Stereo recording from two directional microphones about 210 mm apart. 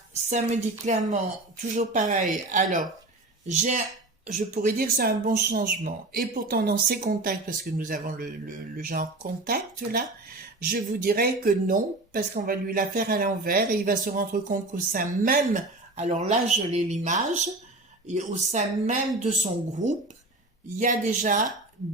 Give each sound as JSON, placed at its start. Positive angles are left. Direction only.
{"t": 0.3, "sound": "speech", "side_deg": -35}